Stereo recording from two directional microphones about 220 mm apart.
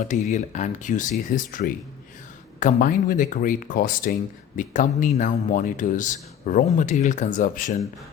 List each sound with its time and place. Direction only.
0.0 s speech: 35° left (ahead or behind)